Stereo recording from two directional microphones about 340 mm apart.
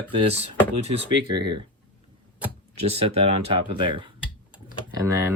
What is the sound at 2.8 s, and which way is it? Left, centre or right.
Speech, centre.